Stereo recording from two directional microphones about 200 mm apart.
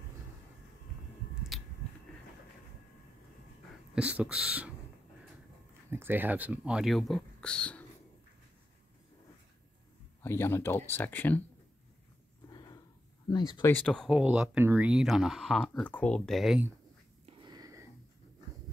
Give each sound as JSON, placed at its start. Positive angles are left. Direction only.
{"t": 3.9, "sound": "speech", "side_deg": -5}
{"t": 5.9, "sound": "speech", "side_deg": -10}
{"t": 10.2, "sound": "speech", "side_deg": 10}
{"t": 12.4, "sound": "a sound", "side_deg": 20}
{"t": 13.3, "sound": "speech", "side_deg": 20}
{"t": 13.7, "sound": "speech", "side_deg": 5}
{"t": 17.3, "sound": "wheeze", "side_deg": -20}